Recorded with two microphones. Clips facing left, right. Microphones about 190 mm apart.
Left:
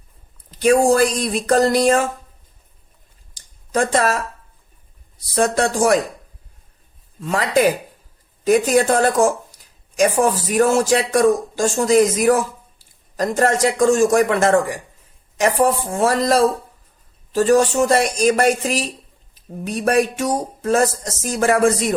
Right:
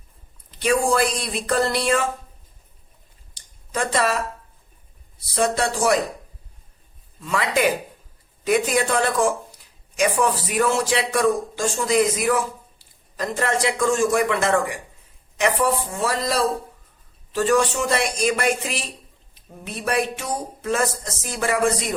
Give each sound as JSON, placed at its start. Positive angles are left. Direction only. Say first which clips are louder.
{"t": 0.6, "sound": "speech", "louder": "left 6 dB", "side_deg": 45}
{"t": 3.3, "sound": "a sound", "louder": "left 7 dB", "side_deg": 45}
{"t": 5.3, "sound": "speech", "louder": "left 4 dB", "side_deg": 45}
{"t": 7.2, "sound": "speech", "louder": "left 4 dB", "side_deg": 40}